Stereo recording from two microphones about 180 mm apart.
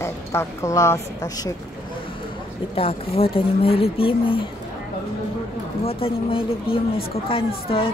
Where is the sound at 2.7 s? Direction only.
35° left (ahead or behind).